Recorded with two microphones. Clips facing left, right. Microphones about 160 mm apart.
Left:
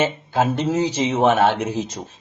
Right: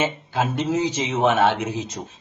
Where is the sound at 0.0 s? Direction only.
40° left (ahead or behind).